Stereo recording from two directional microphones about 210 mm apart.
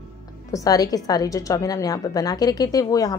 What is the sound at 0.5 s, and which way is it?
A woman's voice, 15° left (ahead or behind).